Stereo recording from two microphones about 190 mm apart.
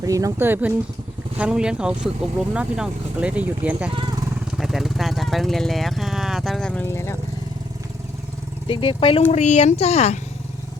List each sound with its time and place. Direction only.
0.0 s speech: 15° right (ahead or behind); by 7.2 s 15° left (ahead or behind)
8.6 s speech: 25° left (ahead or behind)